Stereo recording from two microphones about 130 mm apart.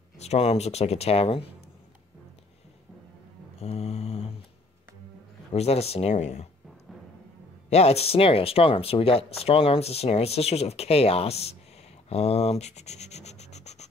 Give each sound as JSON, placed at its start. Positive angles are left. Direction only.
{"t": 0.2, "sound": "speech", "side_deg": 55}
{"t": 3.6, "sound": "mantra", "side_deg": 50}
{"t": 5.5, "sound": "speech", "side_deg": 50}
{"t": 7.7, "sound": "speech", "side_deg": 55}